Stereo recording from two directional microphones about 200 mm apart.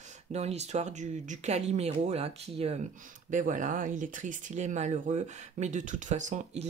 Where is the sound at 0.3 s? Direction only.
35° right (ahead or behind).